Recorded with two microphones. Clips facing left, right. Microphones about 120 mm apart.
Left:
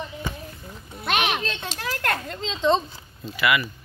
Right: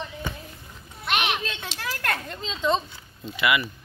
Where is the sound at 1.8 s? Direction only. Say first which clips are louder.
Left 2 dB; 20° left (ahead or behind).